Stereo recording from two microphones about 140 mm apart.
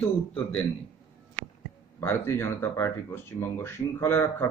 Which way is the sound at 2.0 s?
15° left (ahead or behind).